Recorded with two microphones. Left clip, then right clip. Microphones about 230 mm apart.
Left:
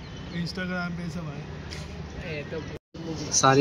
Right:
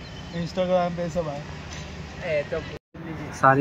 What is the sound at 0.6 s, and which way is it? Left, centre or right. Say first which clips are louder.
Speech: right 11 dB; right.